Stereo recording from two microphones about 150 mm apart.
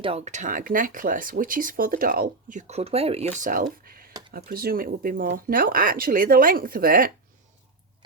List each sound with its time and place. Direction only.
0.0 s speech: 45° right (ahead or behind)
3.3 s speech: 60° right (ahead or behind); by 4.1 s 75° right (ahead or behind)
4.3 s speech: 90° right; by 7.1 s 75° right (ahead or behind)